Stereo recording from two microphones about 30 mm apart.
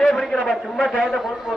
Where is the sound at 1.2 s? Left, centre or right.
Centre.